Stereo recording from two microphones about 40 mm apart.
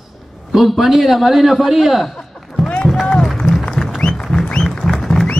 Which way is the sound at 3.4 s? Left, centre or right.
Centre.